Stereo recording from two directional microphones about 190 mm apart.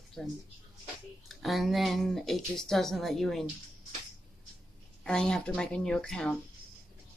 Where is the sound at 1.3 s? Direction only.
Centre (ahead or behind).